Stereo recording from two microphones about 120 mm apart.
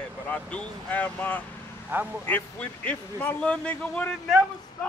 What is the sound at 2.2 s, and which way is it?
Speech, 15° left (ahead or behind).